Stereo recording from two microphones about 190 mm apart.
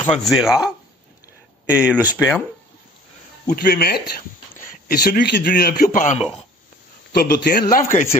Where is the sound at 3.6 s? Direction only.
55° left (ahead or behind).